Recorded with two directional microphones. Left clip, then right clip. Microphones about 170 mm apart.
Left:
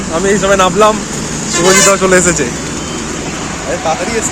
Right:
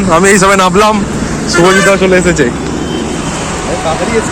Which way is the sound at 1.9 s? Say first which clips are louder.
Right 1 dB; 5° left (ahead or behind).